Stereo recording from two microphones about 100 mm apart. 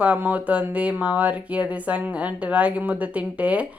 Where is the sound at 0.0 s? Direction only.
15° right (ahead or behind).